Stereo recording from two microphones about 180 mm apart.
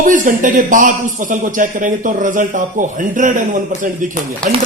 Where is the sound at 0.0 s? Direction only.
45° right (ahead or behind).